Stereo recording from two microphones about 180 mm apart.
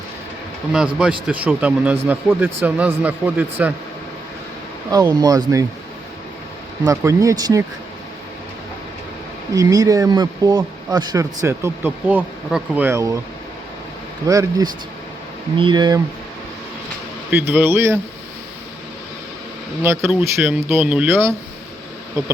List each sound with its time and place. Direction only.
0.9 s speech: 5° right (ahead or behind)
4.9 s speech: 20° right (ahead or behind)
6.8 s speech: 15° right (ahead or behind)
9.6 s speech: 20° right (ahead or behind)
14.3 s speech: 20° right (ahead or behind)
17.3 s speech: 10° right (ahead or behind)
19.8 s speech: 15° right (ahead or behind)